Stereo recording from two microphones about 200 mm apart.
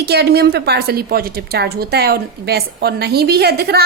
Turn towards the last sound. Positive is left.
turn(degrees=-55)  # may be behind; listen again after turning